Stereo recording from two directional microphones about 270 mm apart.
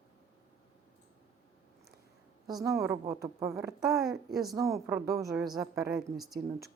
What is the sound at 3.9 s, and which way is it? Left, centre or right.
Speech, centre.